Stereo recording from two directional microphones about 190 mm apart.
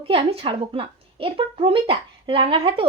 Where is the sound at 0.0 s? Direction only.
30° right (ahead or behind).